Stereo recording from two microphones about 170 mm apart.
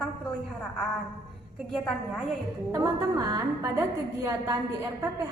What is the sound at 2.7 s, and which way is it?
A woman's voice, 15° right (ahead or behind).